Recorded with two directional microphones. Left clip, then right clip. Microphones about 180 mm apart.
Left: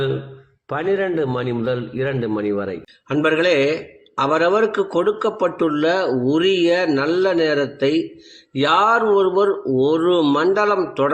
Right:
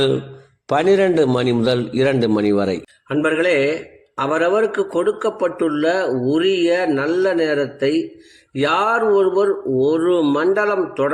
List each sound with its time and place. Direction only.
0.7 s a man's voice: 40° right (ahead or behind)
3.1 s a man's voice: 15° left (ahead or behind)